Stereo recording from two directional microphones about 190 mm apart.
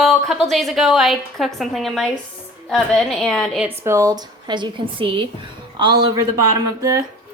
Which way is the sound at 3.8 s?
15° right (ahead or behind).